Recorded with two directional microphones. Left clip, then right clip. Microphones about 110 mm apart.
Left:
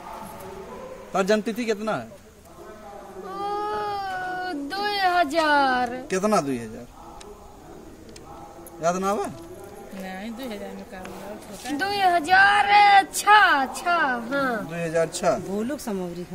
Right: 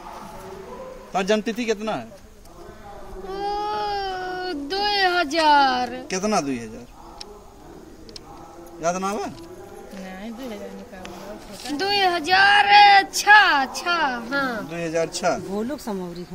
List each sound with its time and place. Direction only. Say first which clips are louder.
1.1 s speech: even; 25° left (ahead or behind)
3.3 s baby cry: right 2 dB; 30° left (ahead or behind)
8.8 s speech: left 1 dB; 25° left (ahead or behind)
11.6 s speech: right 1 dB; 25° left (ahead or behind)
15.5 s speech: right 1 dB; centre (ahead or behind)